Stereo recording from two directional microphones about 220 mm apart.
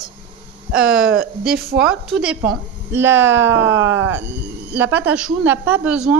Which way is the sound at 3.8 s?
60° right (ahead or behind).